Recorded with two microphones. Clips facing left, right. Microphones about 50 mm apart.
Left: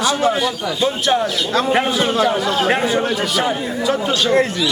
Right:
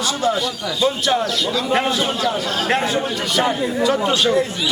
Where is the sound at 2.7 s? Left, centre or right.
Centre.